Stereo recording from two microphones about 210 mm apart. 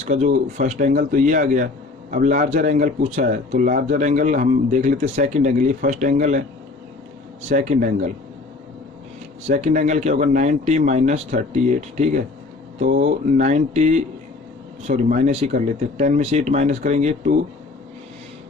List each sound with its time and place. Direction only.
0.0 s speech: 35° right (ahead or behind)
7.4 s speech: 30° right (ahead or behind)
9.5 s speech: 35° right (ahead or behind)